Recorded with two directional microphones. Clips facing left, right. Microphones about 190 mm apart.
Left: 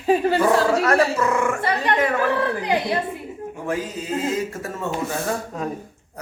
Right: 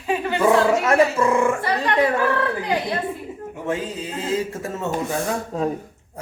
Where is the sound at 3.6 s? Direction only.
25° right (ahead or behind).